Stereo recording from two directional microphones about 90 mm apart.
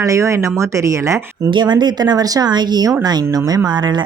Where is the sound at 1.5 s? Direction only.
55° right (ahead or behind).